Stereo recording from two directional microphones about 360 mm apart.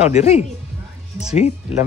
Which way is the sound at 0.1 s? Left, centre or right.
Centre.